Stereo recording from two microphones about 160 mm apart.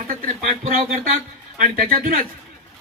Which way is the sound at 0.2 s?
60° right (ahead or behind).